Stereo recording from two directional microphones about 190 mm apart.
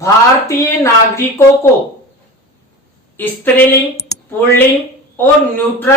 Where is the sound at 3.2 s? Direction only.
10° left (ahead or behind).